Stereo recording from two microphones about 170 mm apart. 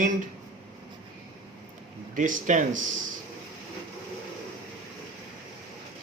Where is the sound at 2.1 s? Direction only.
50° right (ahead or behind).